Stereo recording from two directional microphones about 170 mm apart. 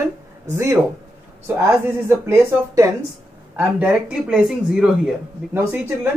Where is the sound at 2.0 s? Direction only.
15° right (ahead or behind).